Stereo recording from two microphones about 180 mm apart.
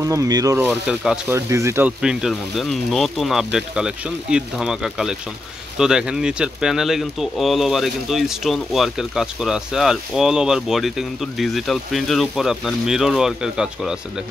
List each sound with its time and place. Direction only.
0.0 s speech: 15° right (ahead or behind)
0.7 s speech: 5° right (ahead or behind)
1.3 s speech: 15° right (ahead or behind)